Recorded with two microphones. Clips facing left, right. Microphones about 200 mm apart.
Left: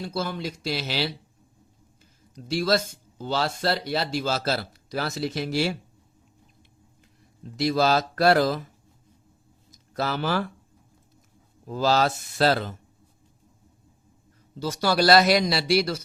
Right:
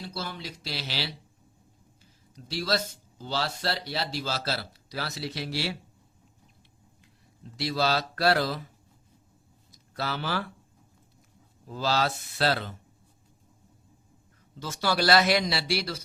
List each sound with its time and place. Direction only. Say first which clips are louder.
0.1 s speech: left 7 dB; 50° left (ahead or behind)
2.3 s speech: left 6 dB; 50° left (ahead or behind)
7.5 s speech: left 5 dB; 45° left (ahead or behind)
9.7 s speech: left 5 dB; 45° left (ahead or behind)
11.7 s speech: left 5 dB; 45° left (ahead or behind)
14.5 s a man's voice: left 5 dB; 35° left (ahead or behind)